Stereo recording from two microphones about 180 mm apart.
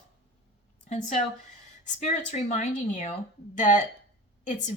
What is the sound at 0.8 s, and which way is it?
Speech, 40° left (ahead or behind).